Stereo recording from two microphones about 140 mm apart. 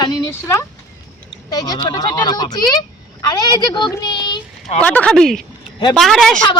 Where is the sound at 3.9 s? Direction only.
30° left (ahead or behind).